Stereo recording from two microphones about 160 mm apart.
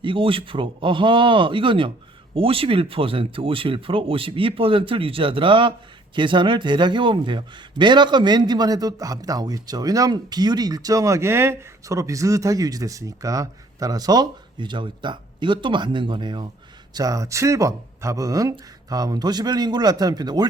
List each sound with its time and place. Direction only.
0.0 s a man's voice: 35° right (ahead or behind)